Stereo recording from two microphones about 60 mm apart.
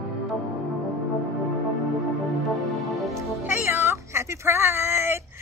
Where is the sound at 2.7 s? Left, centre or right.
Centre.